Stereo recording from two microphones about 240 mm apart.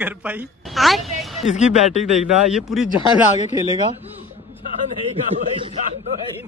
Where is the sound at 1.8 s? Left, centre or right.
Left.